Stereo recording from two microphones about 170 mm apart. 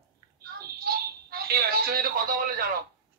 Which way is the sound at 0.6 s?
65° right (ahead or behind).